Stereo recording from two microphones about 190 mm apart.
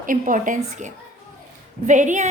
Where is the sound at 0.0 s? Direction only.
45° right (ahead or behind).